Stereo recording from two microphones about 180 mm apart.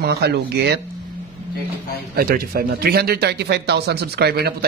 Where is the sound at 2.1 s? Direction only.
55° right (ahead or behind).